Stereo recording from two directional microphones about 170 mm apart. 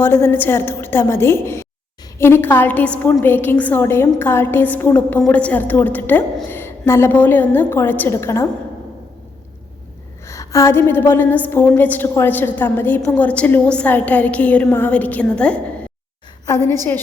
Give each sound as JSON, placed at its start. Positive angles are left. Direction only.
{"t": 0.0, "sound": "a woman's voice", "side_deg": 15}
{"t": 10.2, "sound": "a woman's voice", "side_deg": 20}